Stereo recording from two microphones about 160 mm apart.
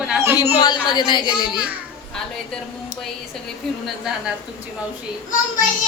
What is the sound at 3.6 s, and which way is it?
Speech, centre (ahead or behind).